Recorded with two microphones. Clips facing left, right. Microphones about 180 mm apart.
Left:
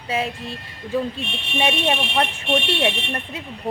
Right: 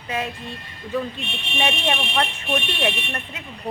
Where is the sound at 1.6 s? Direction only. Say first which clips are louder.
Left 2 dB; 25° left (ahead or behind).